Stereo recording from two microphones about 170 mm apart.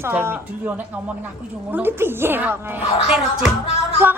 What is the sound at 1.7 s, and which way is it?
A woman's voice, 10° right (ahead or behind).